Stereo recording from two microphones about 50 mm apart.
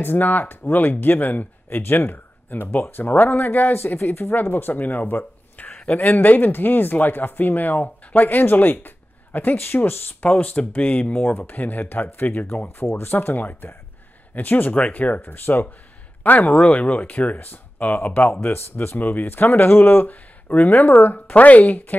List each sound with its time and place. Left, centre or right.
0.0 s speech: left
5.7 s a sound: left
5.9 s speech: left
12.6 s speech: left
18.4 s speech: left
18.9 s speech: left